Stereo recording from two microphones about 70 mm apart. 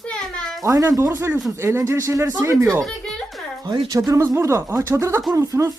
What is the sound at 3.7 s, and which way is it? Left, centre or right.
Speech, right.